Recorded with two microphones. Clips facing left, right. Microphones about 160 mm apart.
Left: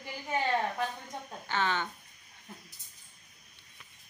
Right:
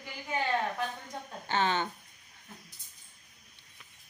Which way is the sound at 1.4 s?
30° right (ahead or behind).